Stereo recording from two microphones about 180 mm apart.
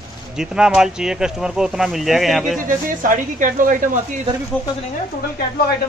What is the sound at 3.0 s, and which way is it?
A woman's voice, 45° right (ahead or behind).